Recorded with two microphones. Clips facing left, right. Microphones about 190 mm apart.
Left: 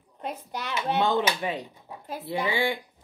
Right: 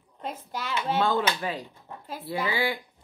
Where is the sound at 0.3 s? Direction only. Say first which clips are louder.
Even; 20° left (ahead or behind).